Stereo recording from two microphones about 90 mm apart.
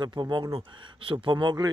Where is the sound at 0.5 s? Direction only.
75° right (ahead or behind).